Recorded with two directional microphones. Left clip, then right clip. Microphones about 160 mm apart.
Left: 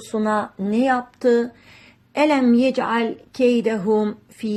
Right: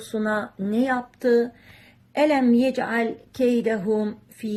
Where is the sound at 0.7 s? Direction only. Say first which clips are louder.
Left 4 dB; 20° left (ahead or behind).